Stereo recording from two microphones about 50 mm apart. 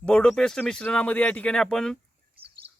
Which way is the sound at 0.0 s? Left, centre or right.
Left.